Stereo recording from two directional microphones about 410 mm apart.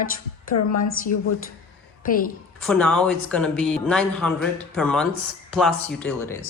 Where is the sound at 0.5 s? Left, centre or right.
Left.